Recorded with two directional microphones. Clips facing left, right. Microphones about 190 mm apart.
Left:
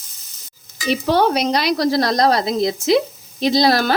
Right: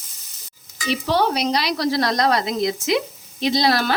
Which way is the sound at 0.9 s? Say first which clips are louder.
Left 4 dB; 50° left (ahead or behind).